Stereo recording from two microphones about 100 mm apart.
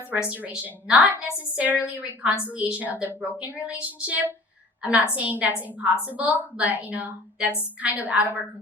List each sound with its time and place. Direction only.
0.1 s a woman's voice: 15° right (ahead or behind)